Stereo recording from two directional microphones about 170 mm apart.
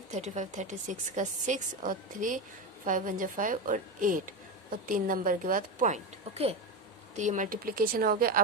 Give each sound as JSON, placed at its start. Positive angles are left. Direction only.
{"t": 0.1, "sound": "a woman's voice", "side_deg": -45}